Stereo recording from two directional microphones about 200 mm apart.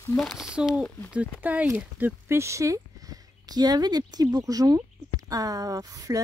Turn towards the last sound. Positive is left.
turn(degrees=-15)  # may be behind; listen again after turning